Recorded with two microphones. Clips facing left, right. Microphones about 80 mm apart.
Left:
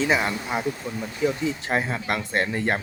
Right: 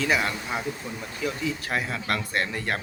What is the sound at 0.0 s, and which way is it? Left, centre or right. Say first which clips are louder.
Speech: left 2 dB; left.